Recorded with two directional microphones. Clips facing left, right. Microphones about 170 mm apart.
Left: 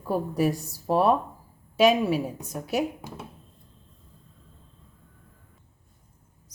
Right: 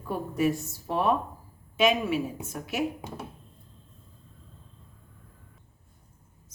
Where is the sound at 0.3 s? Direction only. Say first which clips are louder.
Left 1 dB; 35° left (ahead or behind).